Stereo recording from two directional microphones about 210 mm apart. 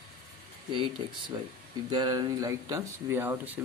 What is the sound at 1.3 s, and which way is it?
Speech, 25° right (ahead or behind).